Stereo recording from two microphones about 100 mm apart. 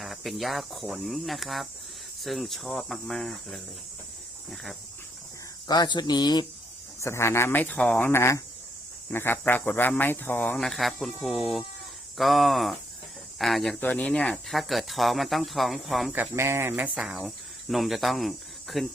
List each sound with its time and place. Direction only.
0.0 s speech: centre (ahead or behind)
5.6 s speech: 45° left (ahead or behind)
7.0 s speech: 25° left (ahead or behind)
10.6 s speech: 5° left (ahead or behind)
13.7 s speech: 15° left (ahead or behind)
14.5 s speech: centre (ahead or behind)
16.3 s speech: 25° right (ahead or behind)
16.9 s speech: 10° right (ahead or behind)